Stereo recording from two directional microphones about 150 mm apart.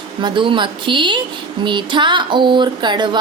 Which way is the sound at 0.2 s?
30° right (ahead or behind).